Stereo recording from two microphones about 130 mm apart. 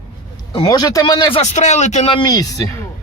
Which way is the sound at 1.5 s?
60° left (ahead or behind).